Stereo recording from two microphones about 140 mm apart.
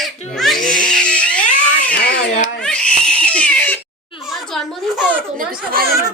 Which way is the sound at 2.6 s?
5° left (ahead or behind).